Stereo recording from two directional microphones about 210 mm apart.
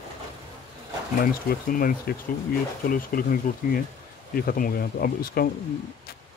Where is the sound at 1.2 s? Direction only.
40° left (ahead or behind).